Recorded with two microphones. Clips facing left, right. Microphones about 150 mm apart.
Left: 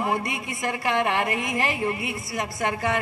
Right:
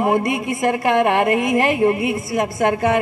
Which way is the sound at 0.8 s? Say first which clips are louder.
Right 7 dB; 50° right (ahead or behind).